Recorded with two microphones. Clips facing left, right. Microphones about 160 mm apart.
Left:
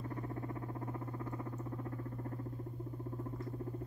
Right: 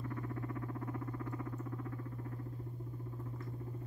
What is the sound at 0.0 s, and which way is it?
Synthesizer, 30° left (ahead or behind).